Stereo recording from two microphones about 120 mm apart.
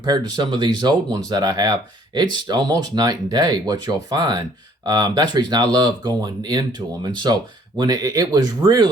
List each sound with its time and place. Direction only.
0.0 s speech: 35° right (ahead or behind)